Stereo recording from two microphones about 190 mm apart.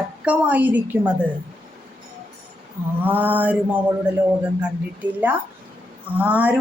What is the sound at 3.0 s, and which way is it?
Speech, 10° right (ahead or behind).